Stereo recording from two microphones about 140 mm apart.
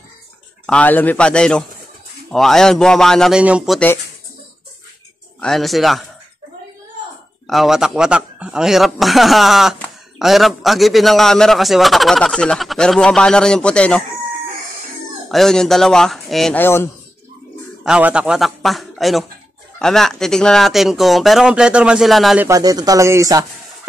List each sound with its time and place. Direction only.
0.7 s a man's voice: 10° left (ahead or behind); by 3.8 s 5° right (ahead or behind)
5.4 s a man's voice: centre (ahead or behind)
7.4 s a man's voice: centre (ahead or behind)
15.2 s a man's voice: centre (ahead or behind)
16.5 s a man's voice: 15° left (ahead or behind)
17.8 s a man's voice: 5° right (ahead or behind)
22.4 s speech: 25° right (ahead or behind)